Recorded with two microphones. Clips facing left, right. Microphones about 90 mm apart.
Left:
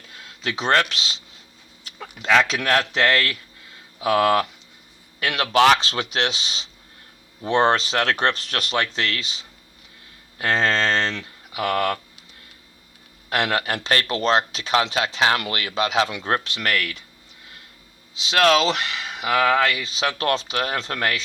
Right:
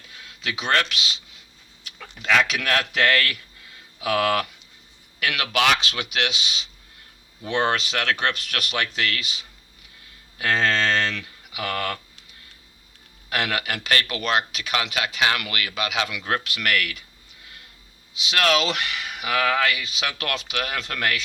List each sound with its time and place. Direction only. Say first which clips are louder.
0.2 s speech: left 3 dB; 35° left (ahead or behind)
13.3 s speech: left 3 dB; 30° left (ahead or behind)
18.1 s speech: left 4 dB; 30° left (ahead or behind)